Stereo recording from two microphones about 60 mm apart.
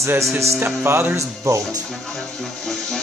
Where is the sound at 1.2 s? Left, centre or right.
Right.